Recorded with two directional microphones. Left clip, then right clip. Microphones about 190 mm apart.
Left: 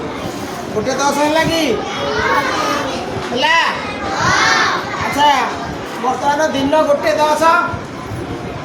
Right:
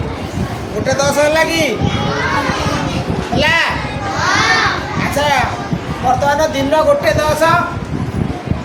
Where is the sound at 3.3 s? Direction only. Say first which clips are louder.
Even; 40° right (ahead or behind).